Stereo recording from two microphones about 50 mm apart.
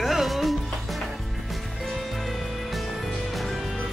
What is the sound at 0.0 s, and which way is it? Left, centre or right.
Music, centre.